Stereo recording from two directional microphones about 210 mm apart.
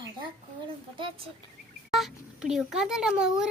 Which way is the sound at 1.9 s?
Centre (ahead or behind).